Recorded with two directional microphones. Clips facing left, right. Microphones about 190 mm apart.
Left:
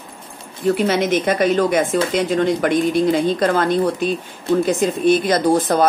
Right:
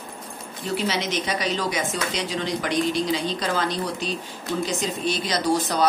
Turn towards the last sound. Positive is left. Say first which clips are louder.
# left 7 dB
turn(degrees=50)  # may be behind; listen again after turning